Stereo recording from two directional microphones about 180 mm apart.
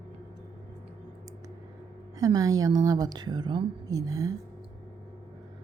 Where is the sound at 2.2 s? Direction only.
20° right (ahead or behind).